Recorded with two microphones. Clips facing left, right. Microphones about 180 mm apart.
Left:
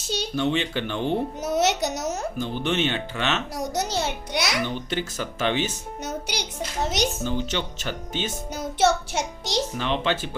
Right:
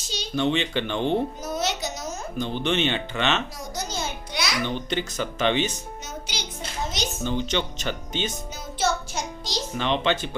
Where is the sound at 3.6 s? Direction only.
70° left (ahead or behind).